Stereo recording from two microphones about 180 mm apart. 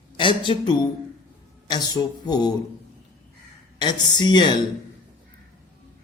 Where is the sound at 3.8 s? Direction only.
25° left (ahead or behind).